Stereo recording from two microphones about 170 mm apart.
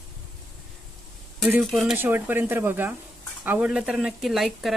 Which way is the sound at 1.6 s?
Centre (ahead or behind).